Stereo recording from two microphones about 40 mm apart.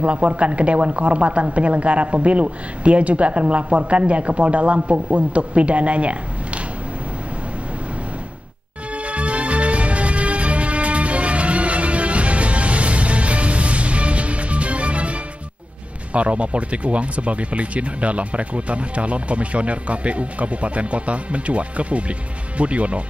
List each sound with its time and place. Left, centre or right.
0.0 s speech: right
8.9 s music: right
16.1 s speech: right